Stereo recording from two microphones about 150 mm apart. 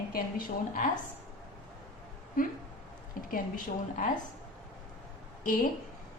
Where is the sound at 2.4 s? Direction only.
65° left (ahead or behind).